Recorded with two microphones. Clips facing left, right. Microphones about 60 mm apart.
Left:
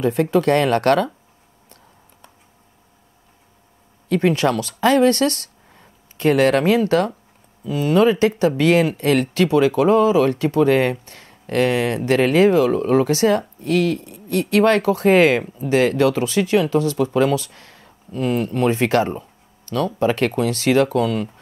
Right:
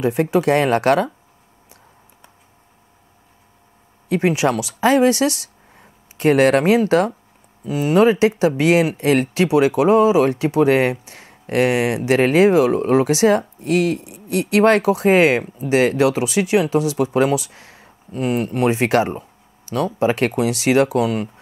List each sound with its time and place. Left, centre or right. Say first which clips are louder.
0.0 s speech: even; centre
4.1 s speech: even; centre
17.0 s speech: right 1 dB; right
17.3 s speech: right 1 dB; centre